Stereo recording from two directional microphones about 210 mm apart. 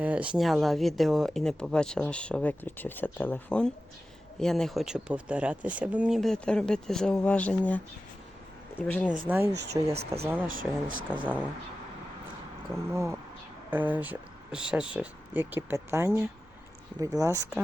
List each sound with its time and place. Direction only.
0.0 s speech: 5° right (ahead or behind)
9.0 s speech: 5° right (ahead or behind)
9.5 s speech: 55° right (ahead or behind)
10.4 s speech: 40° right (ahead or behind)
11.2 s speech: 5° right (ahead or behind)
12.9 s speech: 15° right (ahead or behind)